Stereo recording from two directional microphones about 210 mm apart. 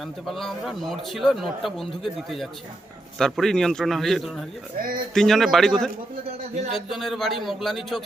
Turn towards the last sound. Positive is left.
turn(degrees=0)  # may be behind; listen again after turning